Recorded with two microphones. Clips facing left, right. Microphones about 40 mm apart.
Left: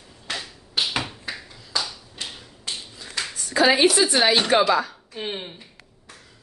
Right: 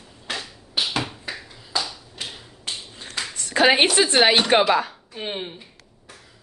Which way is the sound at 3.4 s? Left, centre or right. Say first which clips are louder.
Even; right.